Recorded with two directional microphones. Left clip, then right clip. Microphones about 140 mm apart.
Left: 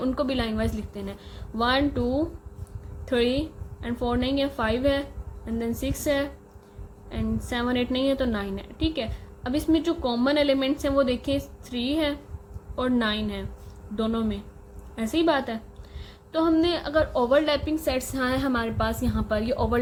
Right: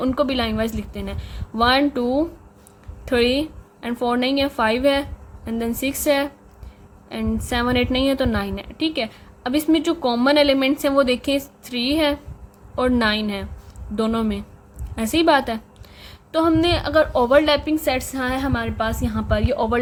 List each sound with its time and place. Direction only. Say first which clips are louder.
0.0 s a woman's voice: right 6 dB; 35° right (ahead or behind)
18.1 s a woman's voice: right 2 dB; centre (ahead or behind); by 19.8 s 25° right (ahead or behind)